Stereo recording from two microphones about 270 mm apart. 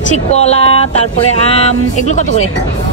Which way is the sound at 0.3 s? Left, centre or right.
Left.